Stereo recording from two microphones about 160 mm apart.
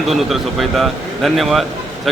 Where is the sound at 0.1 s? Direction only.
Centre (ahead or behind).